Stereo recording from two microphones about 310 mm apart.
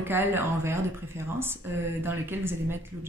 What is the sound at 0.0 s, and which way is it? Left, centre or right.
A woman's voice, centre.